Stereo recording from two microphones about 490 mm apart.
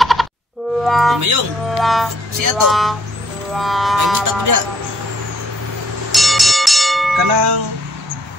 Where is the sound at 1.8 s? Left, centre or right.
Centre.